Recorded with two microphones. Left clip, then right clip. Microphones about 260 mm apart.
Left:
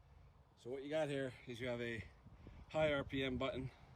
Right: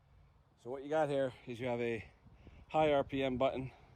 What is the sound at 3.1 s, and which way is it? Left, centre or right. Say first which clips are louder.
Speech: right 8 dB; right.